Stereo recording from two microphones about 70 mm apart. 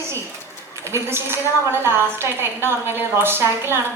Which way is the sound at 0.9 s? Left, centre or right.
Right.